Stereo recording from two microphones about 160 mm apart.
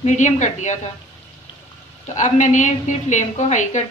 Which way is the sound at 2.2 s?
50° left (ahead or behind).